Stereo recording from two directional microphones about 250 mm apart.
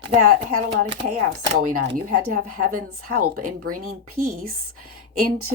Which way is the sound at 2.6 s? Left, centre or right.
Right.